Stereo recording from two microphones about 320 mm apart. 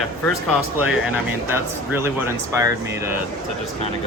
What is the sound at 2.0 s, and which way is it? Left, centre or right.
Speech, centre.